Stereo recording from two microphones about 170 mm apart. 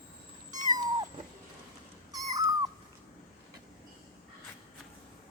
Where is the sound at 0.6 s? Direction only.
20° right (ahead or behind).